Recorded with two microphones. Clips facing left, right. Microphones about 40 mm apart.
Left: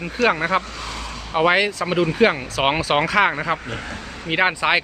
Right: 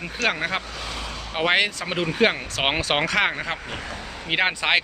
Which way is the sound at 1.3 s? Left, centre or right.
Centre.